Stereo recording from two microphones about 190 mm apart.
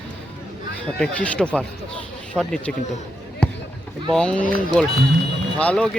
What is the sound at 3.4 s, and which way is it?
Basketball bounce, 5° left (ahead or behind).